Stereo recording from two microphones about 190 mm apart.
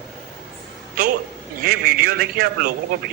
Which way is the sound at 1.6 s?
50° right (ahead or behind).